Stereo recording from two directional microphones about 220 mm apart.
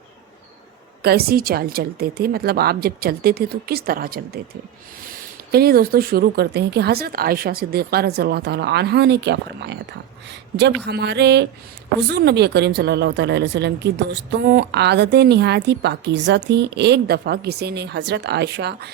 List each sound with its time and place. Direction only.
1.0 s speech: 45° right (ahead or behind)
10.8 s speech: 50° right (ahead or behind)